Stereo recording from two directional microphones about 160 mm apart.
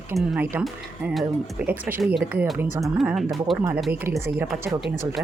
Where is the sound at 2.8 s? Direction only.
Centre (ahead or behind).